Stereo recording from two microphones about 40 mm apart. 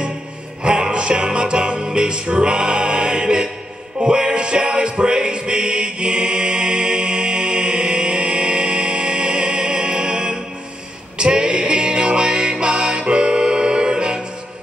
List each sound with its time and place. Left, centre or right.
0.7 s music: right